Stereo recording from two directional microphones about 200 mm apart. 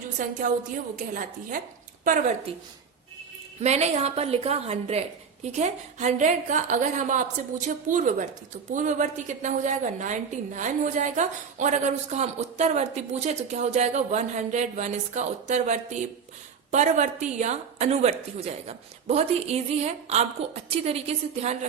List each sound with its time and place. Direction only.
0.2 s a woman's voice: 40° right (ahead or behind)
3.6 s a woman's voice: 35° right (ahead or behind)